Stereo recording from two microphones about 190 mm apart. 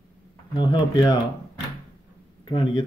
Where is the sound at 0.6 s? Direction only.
25° left (ahead or behind).